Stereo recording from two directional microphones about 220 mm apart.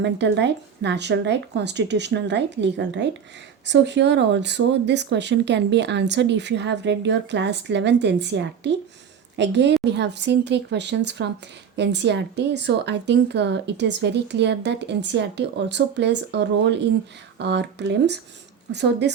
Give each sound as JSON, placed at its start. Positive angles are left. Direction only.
{"t": 0.0, "sound": "a woman's voice", "side_deg": -50}